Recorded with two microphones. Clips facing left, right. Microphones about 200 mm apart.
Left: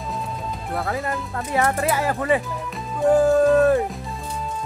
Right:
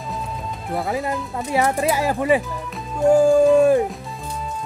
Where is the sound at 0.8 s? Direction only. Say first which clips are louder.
Right 2 dB; 15° right (ahead or behind).